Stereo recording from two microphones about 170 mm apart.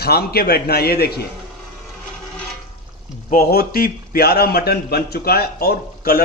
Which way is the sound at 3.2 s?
60° left (ahead or behind).